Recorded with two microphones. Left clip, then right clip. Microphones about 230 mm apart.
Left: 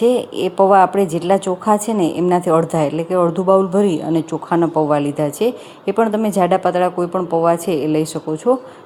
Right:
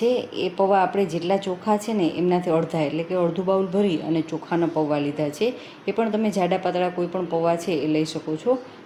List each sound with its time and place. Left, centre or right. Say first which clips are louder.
0.0 s a woman's voice: left 7 dB; left